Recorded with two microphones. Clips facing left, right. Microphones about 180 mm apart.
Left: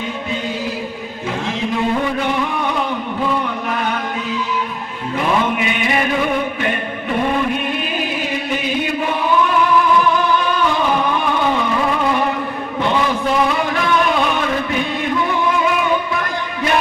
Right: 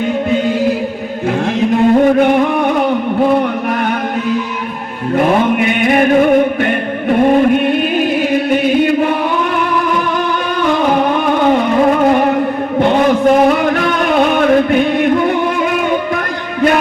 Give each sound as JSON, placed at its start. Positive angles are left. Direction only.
{"t": 1.7, "sound": "chant", "side_deg": -50}
{"t": 5.1, "sound": "chant", "side_deg": -50}
{"t": 10.8, "sound": "music", "side_deg": -50}